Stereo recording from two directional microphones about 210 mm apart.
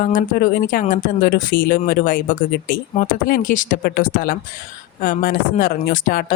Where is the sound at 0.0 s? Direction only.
40° left (ahead or behind).